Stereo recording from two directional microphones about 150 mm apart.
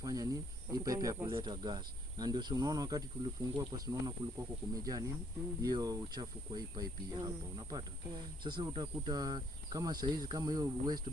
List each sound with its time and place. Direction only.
0.0 s speech: 25° right (ahead or behind)